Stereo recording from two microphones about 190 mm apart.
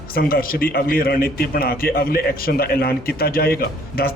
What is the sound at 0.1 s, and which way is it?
A man's voice, 50° left (ahead or behind).